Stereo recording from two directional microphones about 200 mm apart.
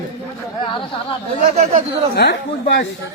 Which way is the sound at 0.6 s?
25° left (ahead or behind).